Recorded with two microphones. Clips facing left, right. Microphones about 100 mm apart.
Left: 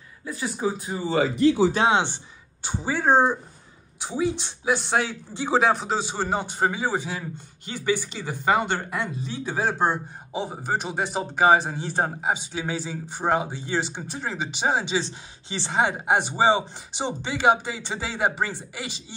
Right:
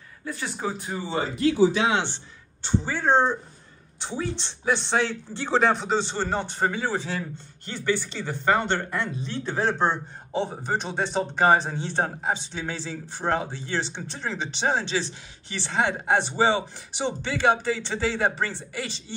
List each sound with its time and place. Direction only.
0.2 s a man's voice: 15° left (ahead or behind)
1.1 s speech: 90° left
1.9 s speech: 20° left (ahead or behind)
2.6 s a man's voice: 10° left (ahead or behind)
15.8 s a man's voice: 10° left (ahead or behind)